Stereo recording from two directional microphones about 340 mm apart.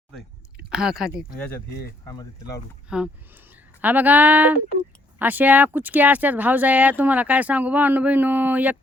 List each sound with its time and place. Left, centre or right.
0.2 s a sound: centre
1.4 s speech: centre
1.7 s speech: left
2.9 s speech: centre